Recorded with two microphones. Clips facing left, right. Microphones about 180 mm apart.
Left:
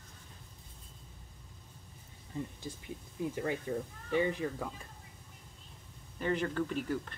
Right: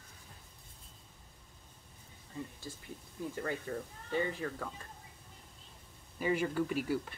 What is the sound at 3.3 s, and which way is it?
Speech, 15° left (ahead or behind).